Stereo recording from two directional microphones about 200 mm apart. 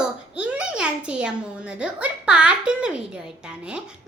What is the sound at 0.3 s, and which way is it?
A child's voice, 5° right (ahead or behind).